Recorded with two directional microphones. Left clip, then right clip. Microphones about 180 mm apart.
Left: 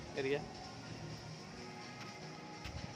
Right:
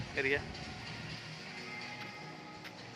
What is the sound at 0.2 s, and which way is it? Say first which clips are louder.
Speech: right 5 dB; centre (ahead or behind).